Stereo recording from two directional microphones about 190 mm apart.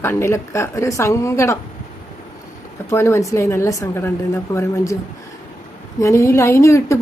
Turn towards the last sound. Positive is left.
turn(degrees=15)  # may be behind; listen again after turning